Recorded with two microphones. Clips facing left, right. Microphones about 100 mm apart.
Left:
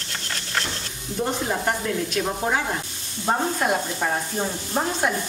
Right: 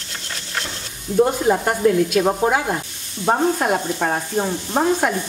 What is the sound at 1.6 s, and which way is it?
Speech, 50° right (ahead or behind).